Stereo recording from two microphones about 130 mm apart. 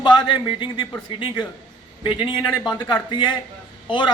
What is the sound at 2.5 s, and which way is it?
Speech, 5° left (ahead or behind).